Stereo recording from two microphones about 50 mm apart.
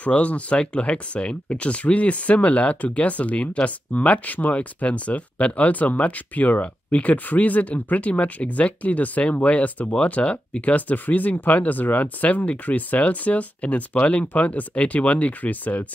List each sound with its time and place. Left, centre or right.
0.0 s speech: left